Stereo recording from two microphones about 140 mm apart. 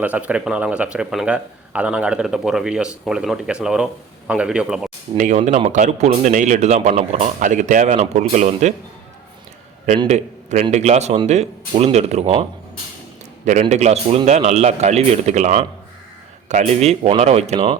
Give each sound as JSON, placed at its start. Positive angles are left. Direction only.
{"t": 0.0, "sound": "speech", "side_deg": -10}
{"t": 5.1, "sound": "speech", "side_deg": -65}
{"t": 10.1, "sound": "a man's voice", "side_deg": -60}
{"t": 13.4, "sound": "a man's voice", "side_deg": -55}